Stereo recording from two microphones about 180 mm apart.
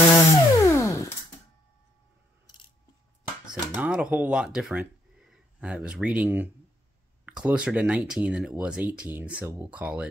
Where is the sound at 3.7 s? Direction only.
5° right (ahead or behind).